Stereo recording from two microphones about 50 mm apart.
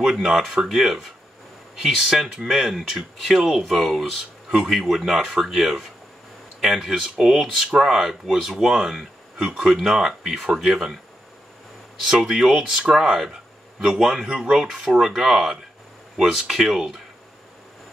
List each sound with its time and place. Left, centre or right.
0.0 s speech: centre
12.0 s speech: centre
14.3 s speech: centre
14.6 s speech: centre